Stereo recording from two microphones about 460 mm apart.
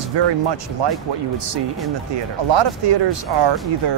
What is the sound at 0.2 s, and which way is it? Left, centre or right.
Speech, right.